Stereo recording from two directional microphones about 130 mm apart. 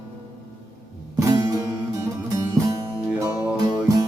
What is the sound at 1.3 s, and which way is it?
Music, 25° right (ahead or behind).